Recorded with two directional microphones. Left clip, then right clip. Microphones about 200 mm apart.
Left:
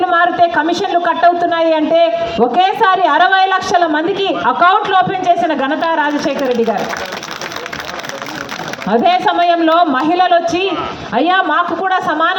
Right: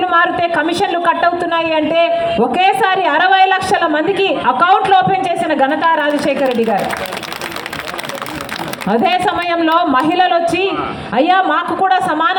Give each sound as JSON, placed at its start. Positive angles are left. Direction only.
{"t": 0.1, "sound": "a woman's voice", "side_deg": -25}
{"t": 8.9, "sound": "a woman's voice", "side_deg": -25}